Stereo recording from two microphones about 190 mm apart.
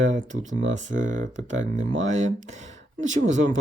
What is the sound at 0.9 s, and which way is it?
Speech, 40° right (ahead or behind).